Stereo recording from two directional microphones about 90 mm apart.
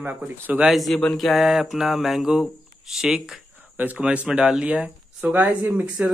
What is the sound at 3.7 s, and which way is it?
Speech, 15° right (ahead or behind).